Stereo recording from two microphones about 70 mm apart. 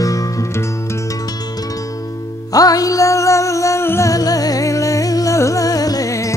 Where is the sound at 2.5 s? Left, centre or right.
Left.